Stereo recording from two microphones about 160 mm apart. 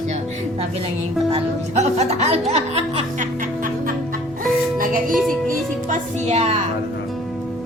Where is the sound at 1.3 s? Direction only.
45° right (ahead or behind); by 5.1 s 60° right (ahead or behind).